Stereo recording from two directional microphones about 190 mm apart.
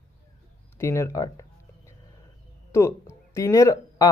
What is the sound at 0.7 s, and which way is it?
Speech, 15° left (ahead or behind).